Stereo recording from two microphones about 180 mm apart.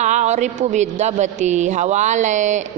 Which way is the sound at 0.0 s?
40° right (ahead or behind).